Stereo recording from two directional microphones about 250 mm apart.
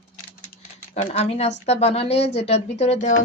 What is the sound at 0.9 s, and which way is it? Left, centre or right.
Speech, left.